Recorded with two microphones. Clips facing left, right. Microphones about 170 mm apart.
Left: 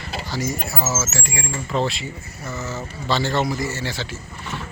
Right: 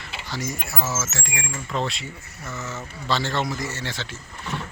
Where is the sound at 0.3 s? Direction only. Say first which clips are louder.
Left 4 dB; centre (ahead or behind).